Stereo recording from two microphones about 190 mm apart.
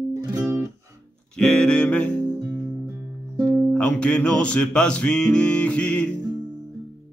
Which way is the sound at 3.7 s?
5° left (ahead or behind).